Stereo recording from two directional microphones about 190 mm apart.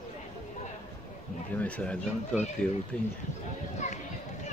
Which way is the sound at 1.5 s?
5° left (ahead or behind).